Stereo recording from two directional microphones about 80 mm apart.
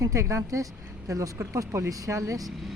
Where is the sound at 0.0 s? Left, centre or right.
Right.